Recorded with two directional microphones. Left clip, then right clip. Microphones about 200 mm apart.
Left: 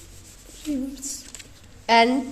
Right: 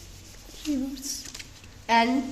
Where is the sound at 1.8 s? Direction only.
55° left (ahead or behind).